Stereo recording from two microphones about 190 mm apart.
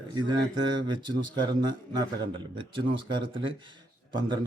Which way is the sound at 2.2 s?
25° right (ahead or behind).